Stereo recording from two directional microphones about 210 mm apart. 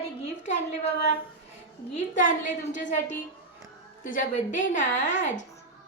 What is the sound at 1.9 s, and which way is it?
A woman's voice, 35° left (ahead or behind).